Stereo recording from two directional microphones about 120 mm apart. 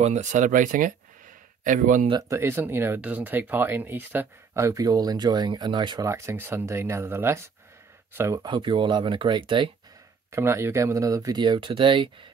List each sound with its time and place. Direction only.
0.0 s speech: 75° right (ahead or behind)
2.2 s speech: 20° right (ahead or behind); by 6.0 s 40° right (ahead or behind)
6.0 s speech: 20° right (ahead or behind)
8.4 s speech: 40° right (ahead or behind)
10.3 s speech: 20° right (ahead or behind); by 12.3 s 40° right (ahead or behind)